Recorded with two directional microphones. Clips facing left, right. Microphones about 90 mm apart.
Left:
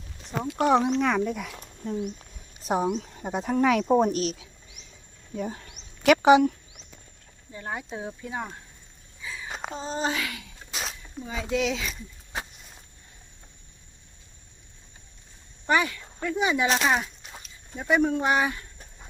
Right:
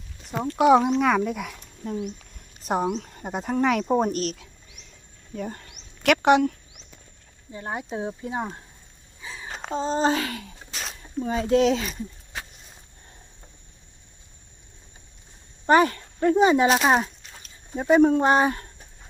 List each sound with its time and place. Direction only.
0.6 s speech: 5° right (ahead or behind)
5.7 s a sound: 5° left (ahead or behind)
7.5 s speech: 20° right (ahead or behind)
9.2 s a sound: 35° right (ahead or behind)
9.5 s a sound: 5° left (ahead or behind)
9.7 s speech: 35° right (ahead or behind)
10.7 s a sound: 5° left (ahead or behind)
11.2 s speech: 50° right (ahead or behind)
15.6 s speech: 40° right (ahead or behind)
16.6 s speech: 5° right (ahead or behind)
17.2 s dog: 5° left (ahead or behind)
17.7 s speech: 35° right (ahead or behind)